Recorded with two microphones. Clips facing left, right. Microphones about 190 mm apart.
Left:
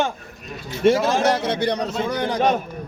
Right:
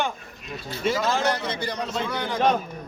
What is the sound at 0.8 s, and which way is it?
Speech, 75° left (ahead or behind).